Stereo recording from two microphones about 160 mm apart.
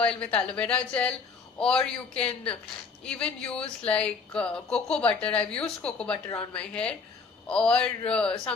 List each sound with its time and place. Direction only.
0.0 s a man's voice: 5° left (ahead or behind)